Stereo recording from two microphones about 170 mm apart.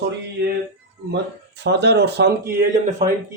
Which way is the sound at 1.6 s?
85° right.